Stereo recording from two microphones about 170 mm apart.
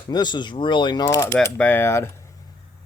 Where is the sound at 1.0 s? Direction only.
15° left (ahead or behind).